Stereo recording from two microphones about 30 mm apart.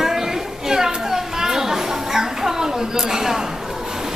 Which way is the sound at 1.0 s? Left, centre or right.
Centre.